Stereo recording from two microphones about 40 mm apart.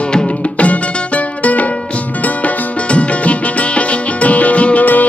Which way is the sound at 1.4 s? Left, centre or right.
Left.